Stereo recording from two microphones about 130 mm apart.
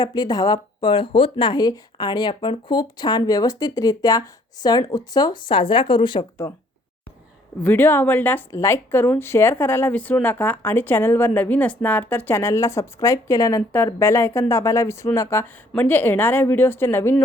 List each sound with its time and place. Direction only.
0.0 s speech: 30° left (ahead or behind)
7.6 s speech: 15° left (ahead or behind)